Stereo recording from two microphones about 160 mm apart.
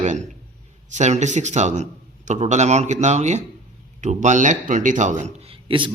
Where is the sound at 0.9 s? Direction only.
45° right (ahead or behind).